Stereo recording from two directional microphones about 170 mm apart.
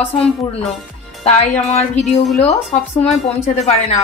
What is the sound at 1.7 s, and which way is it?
A woman's voice, 40° left (ahead or behind).